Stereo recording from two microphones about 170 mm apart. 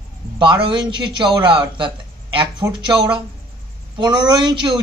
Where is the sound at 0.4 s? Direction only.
30° right (ahead or behind).